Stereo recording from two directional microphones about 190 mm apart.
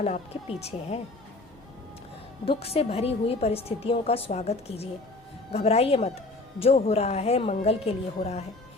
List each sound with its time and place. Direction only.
0.0 s a woman's voice: 35° left (ahead or behind)
2.4 s a woman's voice: 30° left (ahead or behind)